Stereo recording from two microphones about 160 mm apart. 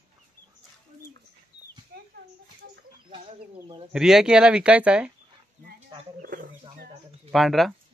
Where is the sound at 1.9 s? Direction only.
75° right (ahead or behind).